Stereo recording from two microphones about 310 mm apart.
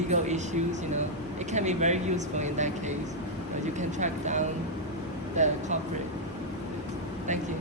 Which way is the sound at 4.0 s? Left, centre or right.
Right.